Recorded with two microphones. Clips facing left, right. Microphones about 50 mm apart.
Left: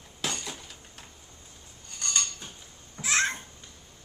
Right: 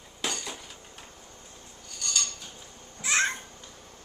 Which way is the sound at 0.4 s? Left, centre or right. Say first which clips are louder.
Right 1 dB; centre.